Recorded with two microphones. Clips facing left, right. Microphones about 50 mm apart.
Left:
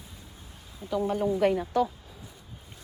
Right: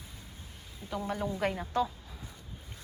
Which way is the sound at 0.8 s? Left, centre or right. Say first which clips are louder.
Left 7 dB; left.